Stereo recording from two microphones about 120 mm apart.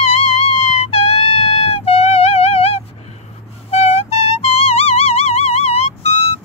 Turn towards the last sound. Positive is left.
turn(degrees=60)  # may be behind; listen again after turning